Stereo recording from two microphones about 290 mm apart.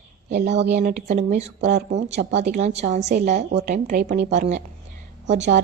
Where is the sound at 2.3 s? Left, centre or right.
Right.